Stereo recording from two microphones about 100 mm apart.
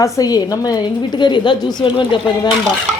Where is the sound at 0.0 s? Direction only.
40° left (ahead or behind).